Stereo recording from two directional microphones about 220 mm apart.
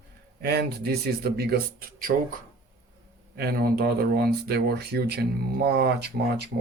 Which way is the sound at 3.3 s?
45° right (ahead or behind).